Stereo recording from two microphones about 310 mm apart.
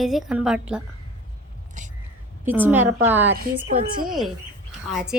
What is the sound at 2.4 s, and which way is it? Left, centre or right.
Speech, centre.